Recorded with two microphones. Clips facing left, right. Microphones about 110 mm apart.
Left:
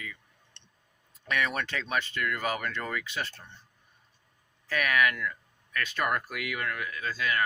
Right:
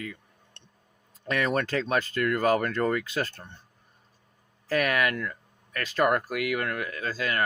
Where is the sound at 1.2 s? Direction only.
35° right (ahead or behind).